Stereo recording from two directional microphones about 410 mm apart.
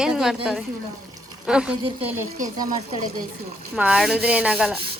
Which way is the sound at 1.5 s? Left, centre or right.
Centre.